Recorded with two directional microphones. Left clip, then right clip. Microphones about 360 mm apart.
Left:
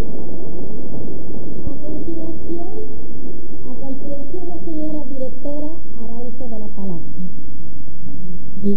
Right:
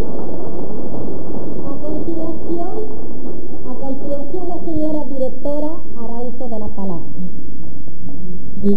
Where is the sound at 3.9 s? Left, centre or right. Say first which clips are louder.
Right 6 dB; left.